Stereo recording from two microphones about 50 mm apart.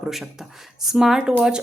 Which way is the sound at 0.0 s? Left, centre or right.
Centre.